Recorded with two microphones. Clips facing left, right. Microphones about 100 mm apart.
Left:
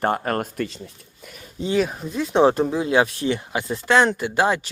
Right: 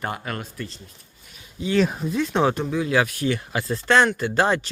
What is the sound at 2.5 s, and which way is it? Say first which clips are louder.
Speech: left 3 dB; 35° left (ahead or behind).